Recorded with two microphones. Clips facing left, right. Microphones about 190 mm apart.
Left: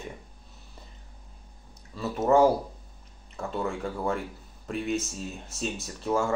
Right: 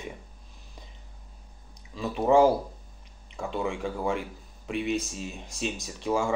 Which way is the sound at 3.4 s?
10° right (ahead or behind).